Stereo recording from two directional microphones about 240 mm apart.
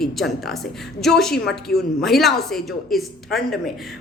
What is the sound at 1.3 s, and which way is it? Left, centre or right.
Speech, left.